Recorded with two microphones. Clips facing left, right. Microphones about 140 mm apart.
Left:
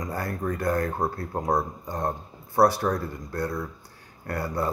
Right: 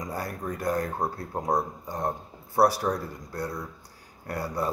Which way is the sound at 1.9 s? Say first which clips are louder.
Left 1 dB; 5° right (ahead or behind).